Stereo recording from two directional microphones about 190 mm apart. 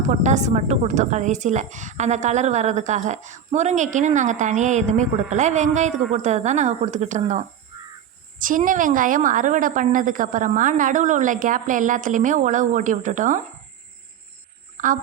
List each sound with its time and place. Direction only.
0.1 s a woman's voice: 40° right (ahead or behind)
14.8 s speech: 45° right (ahead or behind)